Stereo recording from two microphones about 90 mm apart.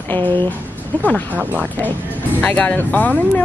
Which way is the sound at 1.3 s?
15° right (ahead or behind).